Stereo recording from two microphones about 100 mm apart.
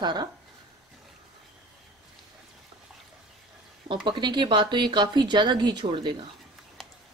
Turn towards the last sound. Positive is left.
turn(degrees=-60)  # may be behind; listen again after turning